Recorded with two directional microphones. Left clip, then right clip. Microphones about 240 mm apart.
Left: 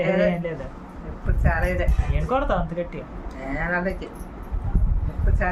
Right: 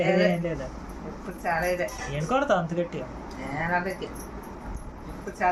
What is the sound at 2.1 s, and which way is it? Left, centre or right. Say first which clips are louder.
Speech: left 1 dB; centre.